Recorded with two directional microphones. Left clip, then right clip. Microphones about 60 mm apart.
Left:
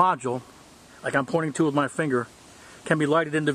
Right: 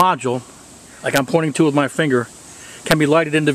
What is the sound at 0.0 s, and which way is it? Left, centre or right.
Speech, centre.